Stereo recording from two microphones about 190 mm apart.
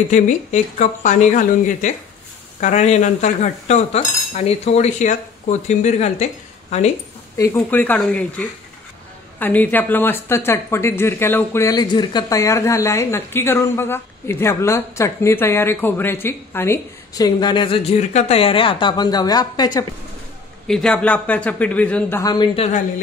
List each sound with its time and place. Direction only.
0.1 s speech: 40° left (ahead or behind)
7.3 s speech: 15° left (ahead or behind)
20.6 s speech: 5° left (ahead or behind)
22.2 s a woman's voice: 20° left (ahead or behind)